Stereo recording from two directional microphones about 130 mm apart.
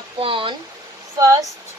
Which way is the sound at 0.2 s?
40° right (ahead or behind).